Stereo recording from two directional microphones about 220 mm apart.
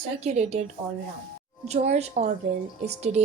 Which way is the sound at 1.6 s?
30° right (ahead or behind).